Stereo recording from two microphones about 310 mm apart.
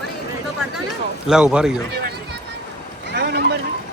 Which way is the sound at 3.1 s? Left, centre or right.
Right.